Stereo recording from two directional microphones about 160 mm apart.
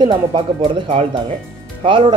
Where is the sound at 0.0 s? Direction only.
30° right (ahead or behind).